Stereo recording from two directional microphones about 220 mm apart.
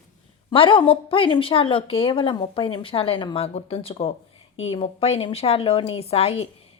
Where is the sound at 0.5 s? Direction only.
25° left (ahead or behind).